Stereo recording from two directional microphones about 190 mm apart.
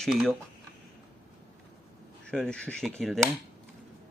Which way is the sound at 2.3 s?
5° left (ahead or behind).